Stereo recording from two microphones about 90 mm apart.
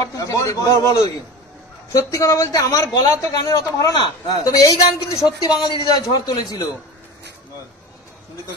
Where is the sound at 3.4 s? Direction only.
40° left (ahead or behind).